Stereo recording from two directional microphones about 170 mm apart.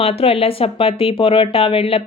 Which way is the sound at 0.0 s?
35° left (ahead or behind).